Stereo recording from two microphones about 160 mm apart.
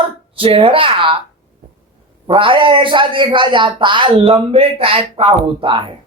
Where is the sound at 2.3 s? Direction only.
35° right (ahead or behind).